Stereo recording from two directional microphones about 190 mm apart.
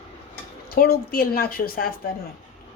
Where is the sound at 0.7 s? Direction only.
55° left (ahead or behind).